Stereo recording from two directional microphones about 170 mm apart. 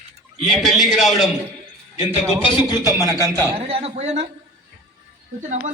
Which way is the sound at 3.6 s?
35° right (ahead or behind).